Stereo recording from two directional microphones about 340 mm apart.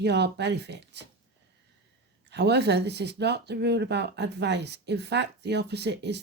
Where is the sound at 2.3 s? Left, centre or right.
Right.